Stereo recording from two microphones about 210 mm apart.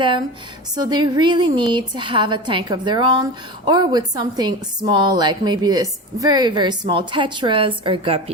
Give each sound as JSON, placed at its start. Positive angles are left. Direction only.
{"t": 0.8, "sound": "a woman's voice", "side_deg": -20}